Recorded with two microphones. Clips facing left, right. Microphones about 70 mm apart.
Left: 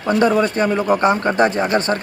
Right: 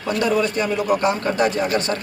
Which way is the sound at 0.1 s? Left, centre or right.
Left.